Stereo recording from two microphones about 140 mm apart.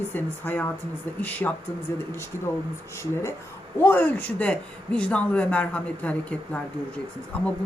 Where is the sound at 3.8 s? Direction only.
15° left (ahead or behind).